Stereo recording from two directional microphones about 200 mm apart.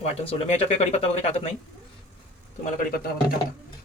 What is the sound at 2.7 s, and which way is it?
Speech, 50° left (ahead or behind).